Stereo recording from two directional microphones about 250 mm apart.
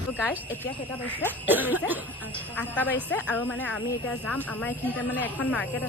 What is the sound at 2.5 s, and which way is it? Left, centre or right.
A woman's voice, centre.